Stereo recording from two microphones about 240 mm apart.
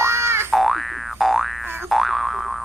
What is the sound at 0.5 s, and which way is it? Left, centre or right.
Boing, centre.